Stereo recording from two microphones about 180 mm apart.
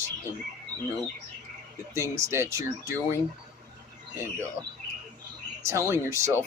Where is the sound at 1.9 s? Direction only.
15° right (ahead or behind).